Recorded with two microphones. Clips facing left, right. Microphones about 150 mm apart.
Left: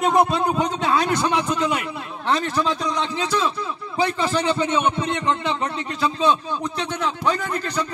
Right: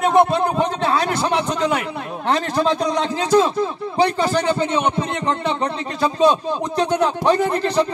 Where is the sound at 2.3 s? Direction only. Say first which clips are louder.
Right 3 dB; 40° right (ahead or behind).